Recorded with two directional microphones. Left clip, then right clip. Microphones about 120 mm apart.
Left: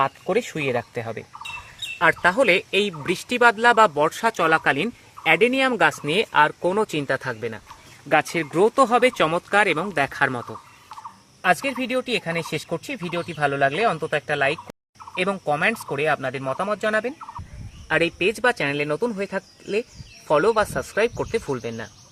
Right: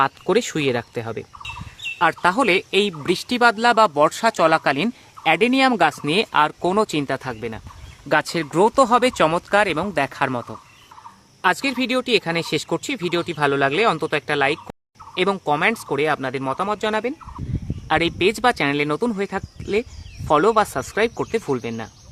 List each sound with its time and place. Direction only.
0.0 s speech: 50° right (ahead or behind)
2.0 s speech: 30° right (ahead or behind)
6.9 s speech: 20° right (ahead or behind)
11.4 s speech: 65° right (ahead or behind); by 21.8 s 30° right (ahead or behind)